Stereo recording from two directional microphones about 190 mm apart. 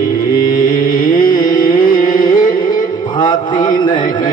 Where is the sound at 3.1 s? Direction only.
25° left (ahead or behind).